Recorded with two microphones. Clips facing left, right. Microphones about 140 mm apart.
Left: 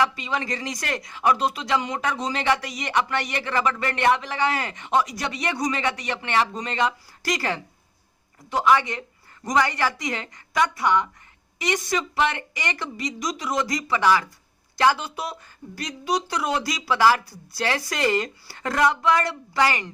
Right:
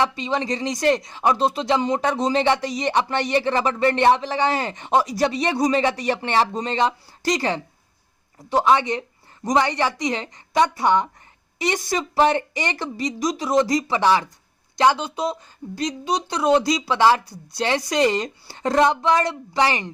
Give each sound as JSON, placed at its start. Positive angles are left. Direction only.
{"t": 0.0, "sound": "speech", "side_deg": -25}